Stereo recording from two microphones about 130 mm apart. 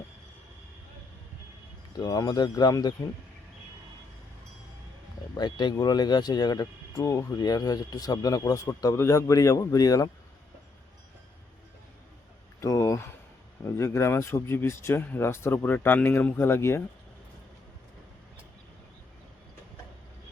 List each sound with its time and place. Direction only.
2.0 s speech: 30° left (ahead or behind)
5.4 s speech: 35° left (ahead or behind)
12.5 s a sound: 25° left (ahead or behind)
13.6 s speech: 20° left (ahead or behind)